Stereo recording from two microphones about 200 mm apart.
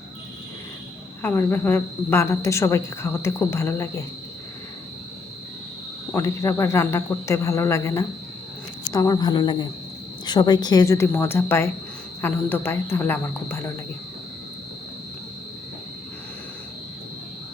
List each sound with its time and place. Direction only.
1.2 s a woman's voice: 10° left (ahead or behind)
6.1 s a woman's voice: 15° left (ahead or behind)